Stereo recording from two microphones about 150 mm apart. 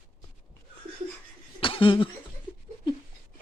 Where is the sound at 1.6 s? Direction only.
35° left (ahead or behind).